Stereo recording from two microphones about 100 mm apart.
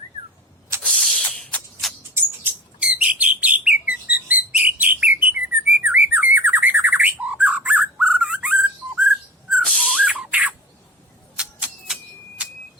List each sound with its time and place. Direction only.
0.8 s a sound: 5° left (ahead or behind)
2.5 s a sound: 20° right (ahead or behind)
2.8 s bird: 15° right (ahead or behind)
9.6 s dog: 5° left (ahead or behind)
10.1 s squawk: 10° right (ahead or behind)
11.3 s music: 5° right (ahead or behind)